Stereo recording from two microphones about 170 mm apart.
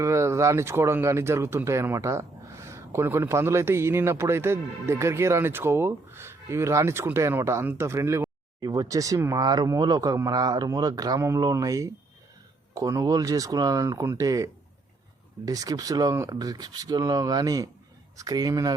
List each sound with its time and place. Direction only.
0.0 s speech: 15° right (ahead or behind)